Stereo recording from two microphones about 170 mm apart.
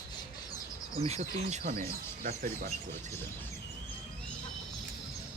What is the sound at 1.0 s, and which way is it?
Speech, 40° right (ahead or behind).